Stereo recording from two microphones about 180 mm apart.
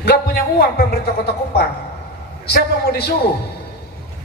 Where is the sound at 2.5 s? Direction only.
60° left (ahead or behind).